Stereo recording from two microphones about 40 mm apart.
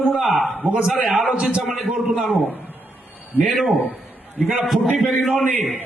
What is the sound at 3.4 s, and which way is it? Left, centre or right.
Speech, right.